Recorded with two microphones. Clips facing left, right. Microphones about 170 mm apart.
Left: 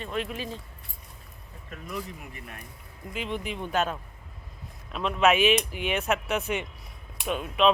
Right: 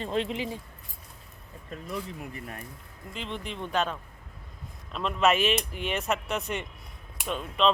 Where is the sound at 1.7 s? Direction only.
30° right (ahead or behind).